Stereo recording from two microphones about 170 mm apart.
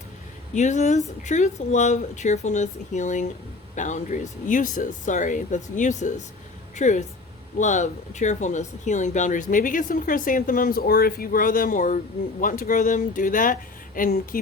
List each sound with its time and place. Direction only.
0.5 s speech: 45° left (ahead or behind)